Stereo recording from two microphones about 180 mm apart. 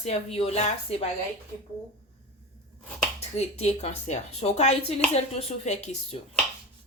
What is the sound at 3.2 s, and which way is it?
A woman's voice, 35° left (ahead or behind).